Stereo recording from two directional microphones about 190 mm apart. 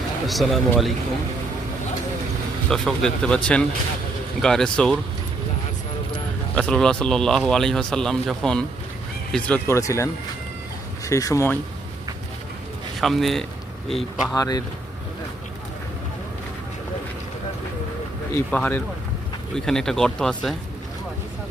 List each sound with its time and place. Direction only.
0.3 s speech: centre (ahead or behind)
2.6 s speech: 5° left (ahead or behind)
6.6 s speech: 5° left (ahead or behind)
13.0 s speech: centre (ahead or behind)
14.3 s speech: 20° left (ahead or behind)
18.5 s speech: 10° left (ahead or behind)